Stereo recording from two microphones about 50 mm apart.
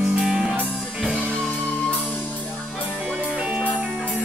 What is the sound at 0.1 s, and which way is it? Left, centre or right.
Music, centre.